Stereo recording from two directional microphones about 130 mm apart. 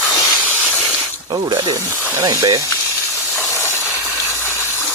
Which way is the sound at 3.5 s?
20° left (ahead or behind).